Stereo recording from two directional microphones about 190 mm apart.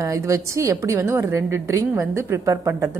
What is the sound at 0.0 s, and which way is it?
A woman's voice, 15° right (ahead or behind).